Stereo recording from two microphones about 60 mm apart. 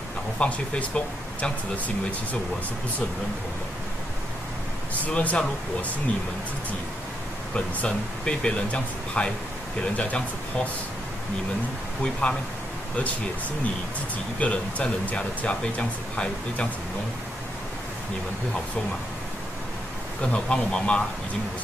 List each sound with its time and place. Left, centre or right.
0.4 s speech: left
5.0 s speech: left
7.5 s speech: centre
12.0 s speech: centre
14.4 s speech: left
20.2 s speech: centre